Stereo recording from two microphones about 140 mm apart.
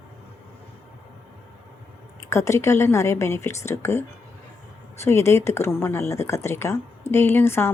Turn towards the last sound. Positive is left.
turn(degrees=15)  # may be behind; listen again after turning